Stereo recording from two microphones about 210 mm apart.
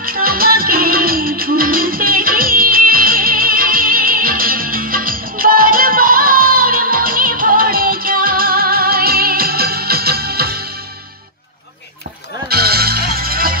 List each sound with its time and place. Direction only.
0.0 s music: 45° right (ahead or behind)
12.4 s music: 45° right (ahead or behind)